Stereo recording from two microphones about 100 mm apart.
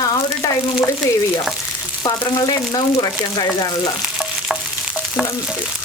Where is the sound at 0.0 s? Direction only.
40° left (ahead or behind).